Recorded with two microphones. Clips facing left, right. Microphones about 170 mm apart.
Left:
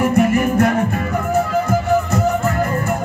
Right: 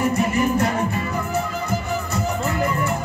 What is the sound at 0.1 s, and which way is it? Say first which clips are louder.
Music: left 5 dB; 55° left (ahead or behind).